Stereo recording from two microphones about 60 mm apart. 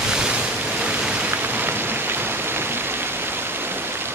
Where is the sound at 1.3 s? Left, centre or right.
Right.